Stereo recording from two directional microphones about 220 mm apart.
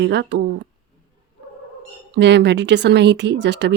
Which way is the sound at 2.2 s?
50° right (ahead or behind).